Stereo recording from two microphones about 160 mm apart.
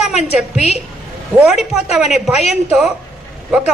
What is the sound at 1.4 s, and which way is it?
A man's voice, 5° right (ahead or behind).